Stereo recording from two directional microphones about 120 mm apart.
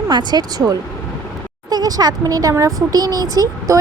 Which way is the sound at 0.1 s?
35° right (ahead or behind).